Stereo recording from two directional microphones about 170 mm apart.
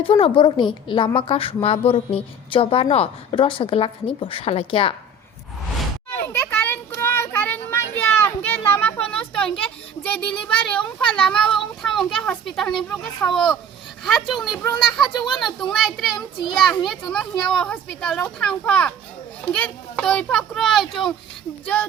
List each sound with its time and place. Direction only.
0.1 s a woman's voice: 30° left (ahead or behind)
6.1 s children playing: 15° left (ahead or behind)
14.0 s a child's voice: centre (ahead or behind)